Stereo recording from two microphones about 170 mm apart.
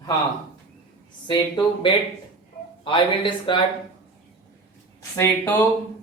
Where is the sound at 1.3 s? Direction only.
25° left (ahead or behind).